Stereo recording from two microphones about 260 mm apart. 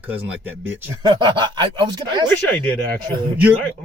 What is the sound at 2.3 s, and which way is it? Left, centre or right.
Speech, centre.